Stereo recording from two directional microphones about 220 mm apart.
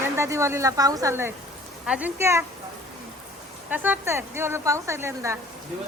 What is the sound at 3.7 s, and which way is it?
A woman's voice, 10° right (ahead or behind).